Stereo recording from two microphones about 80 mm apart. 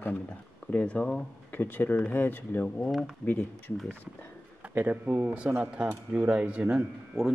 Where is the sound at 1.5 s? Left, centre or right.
Left.